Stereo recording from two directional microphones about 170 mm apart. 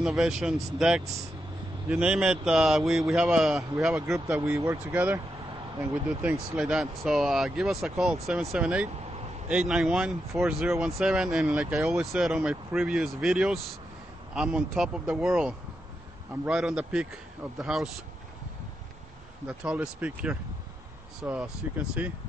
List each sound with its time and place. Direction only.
0.0 s speech: centre (ahead or behind)
4.5 s speech: 15° right (ahead or behind)
6.0 s speech: 5° right (ahead or behind)
19.4 s speech: 5° right (ahead or behind)